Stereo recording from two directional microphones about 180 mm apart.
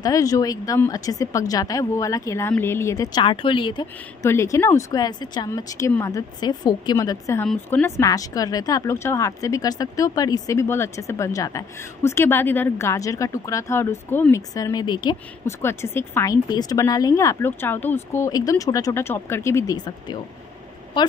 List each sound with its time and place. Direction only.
0.0 s speech: 20° left (ahead or behind)
4.3 s a woman's voice: 15° left (ahead or behind)